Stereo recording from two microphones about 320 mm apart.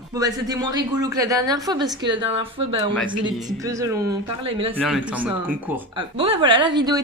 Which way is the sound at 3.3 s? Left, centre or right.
Centre.